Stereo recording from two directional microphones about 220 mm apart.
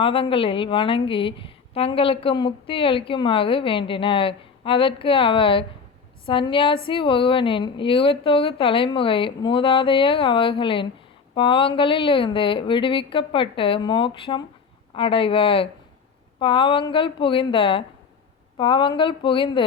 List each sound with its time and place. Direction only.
0.0 s a woman's voice: 25° left (ahead or behind)